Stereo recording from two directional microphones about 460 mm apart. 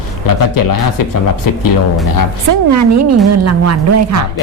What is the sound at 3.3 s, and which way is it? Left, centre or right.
Speech, right.